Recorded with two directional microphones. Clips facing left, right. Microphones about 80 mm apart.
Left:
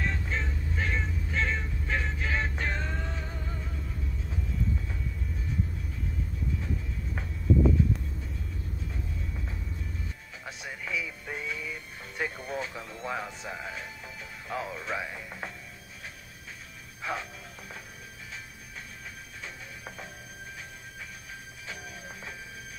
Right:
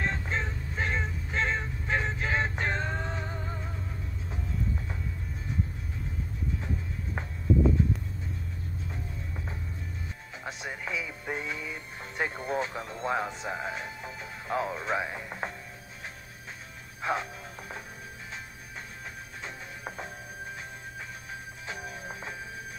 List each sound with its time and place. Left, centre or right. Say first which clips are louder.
0.0 s music: right 1 dB; right
10.4 s music: right 3 dB; right
17.0 s music: right 4 dB; right
19.4 s music: right 3 dB; right
21.3 s music: right 3 dB; right